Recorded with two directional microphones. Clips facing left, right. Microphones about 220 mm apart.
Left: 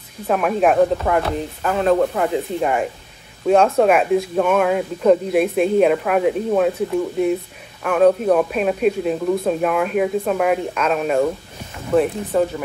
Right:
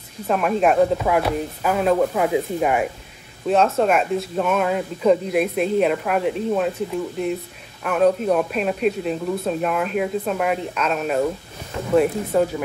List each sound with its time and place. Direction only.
0.3 s speech: centre (ahead or behind)